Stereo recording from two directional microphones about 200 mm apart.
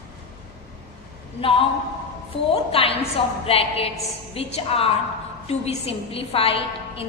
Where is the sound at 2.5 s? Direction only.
30° left (ahead or behind).